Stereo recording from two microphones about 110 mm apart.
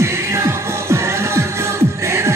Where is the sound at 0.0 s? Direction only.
25° right (ahead or behind).